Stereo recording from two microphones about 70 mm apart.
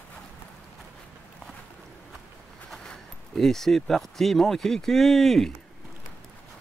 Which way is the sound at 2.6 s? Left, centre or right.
Centre.